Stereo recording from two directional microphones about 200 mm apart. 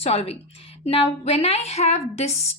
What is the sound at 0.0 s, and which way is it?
A woman's voice, 30° left (ahead or behind).